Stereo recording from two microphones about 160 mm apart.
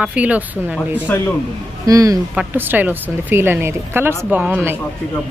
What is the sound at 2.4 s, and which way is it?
Speech, 10° right (ahead or behind).